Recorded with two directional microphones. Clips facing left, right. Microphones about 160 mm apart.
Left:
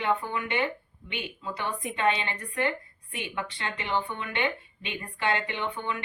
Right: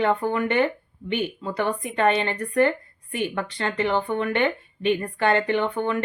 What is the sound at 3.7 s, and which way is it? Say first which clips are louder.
A woman's voice: right 8 dB; 40° right (ahead or behind).